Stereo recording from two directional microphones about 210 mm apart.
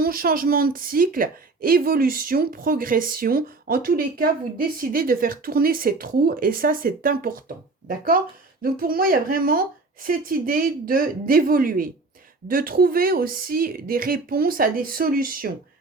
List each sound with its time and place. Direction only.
0.0 s a woman's voice: 45° right (ahead or behind)